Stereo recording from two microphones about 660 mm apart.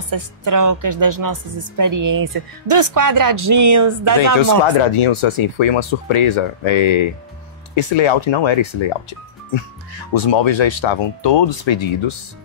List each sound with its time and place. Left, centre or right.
0.1 s speech: right
5.0 s speech: left
10.1 s speech: left